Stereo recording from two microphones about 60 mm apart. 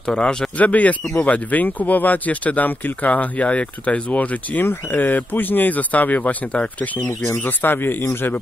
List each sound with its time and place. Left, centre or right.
0.0 s speech: centre
0.6 s speech: left